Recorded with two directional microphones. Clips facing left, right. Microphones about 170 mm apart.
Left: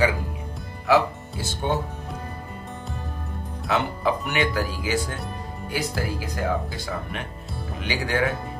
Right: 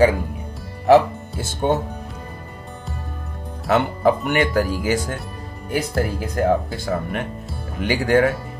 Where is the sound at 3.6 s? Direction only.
50° right (ahead or behind).